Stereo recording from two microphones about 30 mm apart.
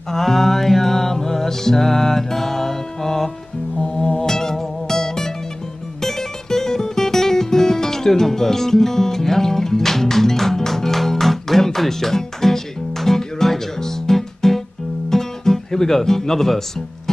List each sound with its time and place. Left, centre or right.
0.1 s music: centre
3.8 s music: left
15.0 s guitar: centre